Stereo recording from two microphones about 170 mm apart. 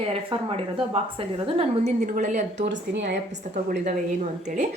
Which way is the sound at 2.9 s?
90° right.